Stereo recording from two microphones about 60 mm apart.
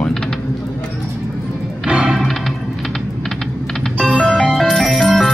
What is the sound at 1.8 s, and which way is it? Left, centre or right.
Music, centre.